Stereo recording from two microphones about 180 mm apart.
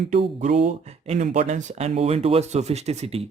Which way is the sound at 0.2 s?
35° right (ahead or behind).